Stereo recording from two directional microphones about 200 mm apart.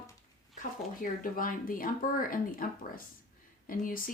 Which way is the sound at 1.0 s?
45° left (ahead or behind).